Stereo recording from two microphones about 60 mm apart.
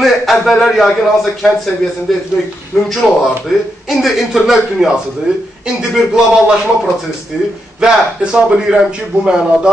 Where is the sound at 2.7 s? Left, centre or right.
Centre.